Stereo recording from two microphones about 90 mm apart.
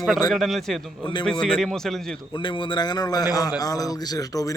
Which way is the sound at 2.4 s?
65° left (ahead or behind).